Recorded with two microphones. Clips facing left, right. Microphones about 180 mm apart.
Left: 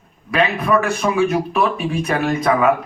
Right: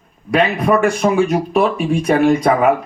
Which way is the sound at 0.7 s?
35° right (ahead or behind).